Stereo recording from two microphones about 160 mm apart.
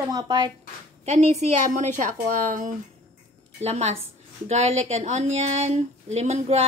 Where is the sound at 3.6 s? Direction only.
45° right (ahead or behind).